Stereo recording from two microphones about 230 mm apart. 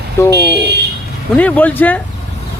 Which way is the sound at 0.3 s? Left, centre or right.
Right.